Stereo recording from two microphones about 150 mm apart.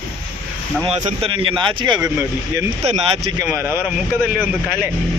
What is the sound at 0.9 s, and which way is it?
Speech, 40° right (ahead or behind).